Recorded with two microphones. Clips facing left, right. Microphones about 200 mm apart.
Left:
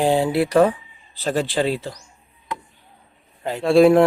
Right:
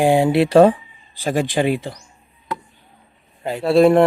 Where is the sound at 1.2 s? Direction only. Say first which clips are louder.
Right 2 dB; 15° right (ahead or behind).